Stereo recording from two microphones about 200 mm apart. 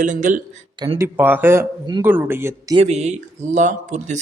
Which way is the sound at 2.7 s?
35° right (ahead or behind).